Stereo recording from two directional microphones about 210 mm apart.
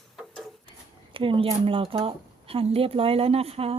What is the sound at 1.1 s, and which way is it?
Speech, 25° right (ahead or behind).